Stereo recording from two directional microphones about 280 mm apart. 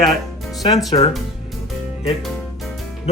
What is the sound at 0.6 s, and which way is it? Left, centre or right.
Speech, centre.